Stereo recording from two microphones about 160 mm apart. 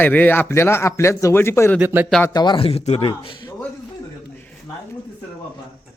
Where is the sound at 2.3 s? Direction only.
25° left (ahead or behind).